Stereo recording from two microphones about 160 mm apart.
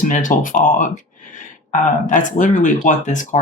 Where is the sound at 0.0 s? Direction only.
55° left (ahead or behind).